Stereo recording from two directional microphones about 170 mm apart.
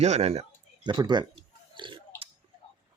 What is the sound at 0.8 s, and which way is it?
Chewing, 25° right (ahead or behind).